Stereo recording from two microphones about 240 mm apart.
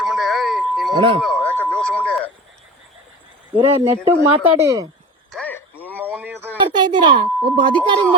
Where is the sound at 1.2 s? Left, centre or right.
Centre.